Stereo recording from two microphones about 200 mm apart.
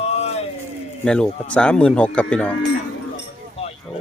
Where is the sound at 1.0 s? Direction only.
5° left (ahead or behind).